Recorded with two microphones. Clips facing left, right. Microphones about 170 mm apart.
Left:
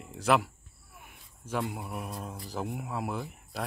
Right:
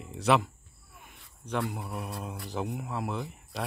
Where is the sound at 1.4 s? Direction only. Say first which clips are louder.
Right 1 dB; 5° left (ahead or behind).